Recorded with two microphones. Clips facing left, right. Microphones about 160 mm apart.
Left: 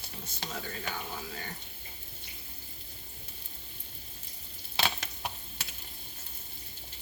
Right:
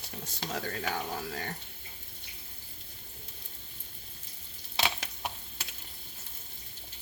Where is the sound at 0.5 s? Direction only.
70° right (ahead or behind).